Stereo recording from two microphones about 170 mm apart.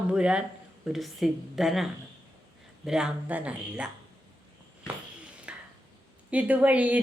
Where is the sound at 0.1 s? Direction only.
5° right (ahead or behind).